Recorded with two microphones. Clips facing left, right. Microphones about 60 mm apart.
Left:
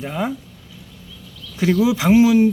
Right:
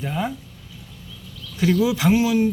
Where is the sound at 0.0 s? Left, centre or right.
Centre.